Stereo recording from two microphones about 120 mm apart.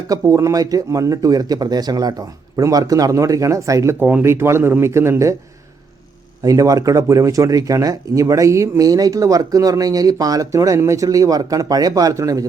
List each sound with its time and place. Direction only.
0.1 s speech: 25° right (ahead or behind)
6.4 s speech: 30° right (ahead or behind)